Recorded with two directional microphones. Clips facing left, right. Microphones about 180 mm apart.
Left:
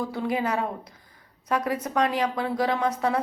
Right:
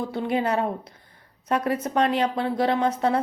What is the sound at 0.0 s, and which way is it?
A woman's voice, 25° right (ahead or behind).